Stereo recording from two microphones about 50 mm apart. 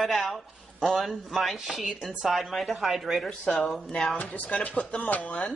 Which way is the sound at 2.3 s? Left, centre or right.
Centre.